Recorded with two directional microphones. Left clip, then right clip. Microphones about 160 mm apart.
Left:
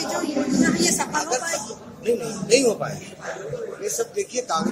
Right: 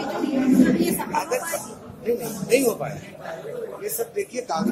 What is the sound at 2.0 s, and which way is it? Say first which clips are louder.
A man's voice: left 2 dB; centre (ahead or behind).